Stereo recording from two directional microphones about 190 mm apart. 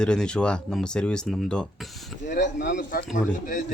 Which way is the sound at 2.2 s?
40° left (ahead or behind).